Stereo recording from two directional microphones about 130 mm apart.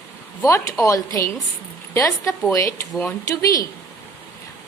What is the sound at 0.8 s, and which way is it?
A woman's voice, 25° left (ahead or behind).